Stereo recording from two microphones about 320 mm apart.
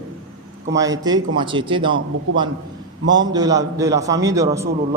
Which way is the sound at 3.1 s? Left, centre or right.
Centre.